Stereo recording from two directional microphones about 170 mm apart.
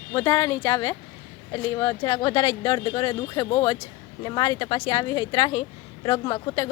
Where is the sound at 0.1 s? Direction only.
20° left (ahead or behind).